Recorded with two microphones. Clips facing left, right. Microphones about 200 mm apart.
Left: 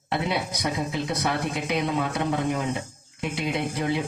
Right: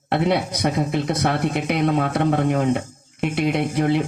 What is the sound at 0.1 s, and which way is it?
Speech, 65° right (ahead or behind).